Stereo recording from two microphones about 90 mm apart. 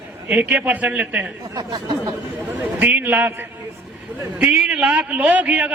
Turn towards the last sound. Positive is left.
turn(degrees=-15)  # may be behind; listen again after turning